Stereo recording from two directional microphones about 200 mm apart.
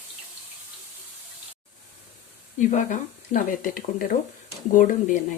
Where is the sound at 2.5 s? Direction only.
40° left (ahead or behind).